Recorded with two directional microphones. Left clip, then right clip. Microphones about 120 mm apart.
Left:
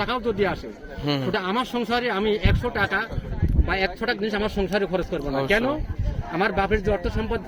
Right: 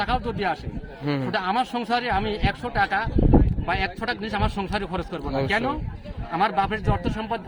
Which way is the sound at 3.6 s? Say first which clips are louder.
Left 1 dB; 50° right (ahead or behind).